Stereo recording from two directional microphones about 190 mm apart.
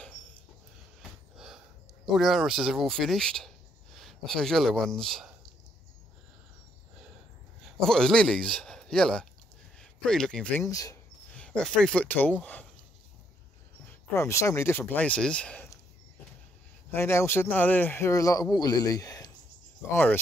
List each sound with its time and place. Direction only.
2.0 s speech: centre (ahead or behind)
7.8 s a man's voice: 5° left (ahead or behind)
10.6 s a man's voice: 20° left (ahead or behind)
11.3 s a man's voice: 5° left (ahead or behind)
13.8 s speech: 15° left (ahead or behind)
16.9 s a man's voice: 15° left (ahead or behind)